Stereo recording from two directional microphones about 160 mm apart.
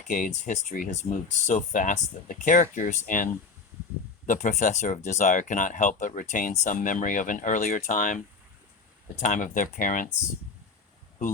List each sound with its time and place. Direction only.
0.1 s speech: 55° left (ahead or behind)
4.3 s speech: 50° left (ahead or behind)
9.2 s speech: 55° left (ahead or behind)